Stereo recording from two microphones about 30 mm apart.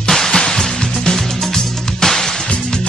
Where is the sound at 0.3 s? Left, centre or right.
Left.